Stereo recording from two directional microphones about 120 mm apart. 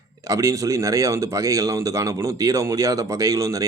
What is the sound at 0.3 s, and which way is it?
A man's voice, 30° right (ahead or behind).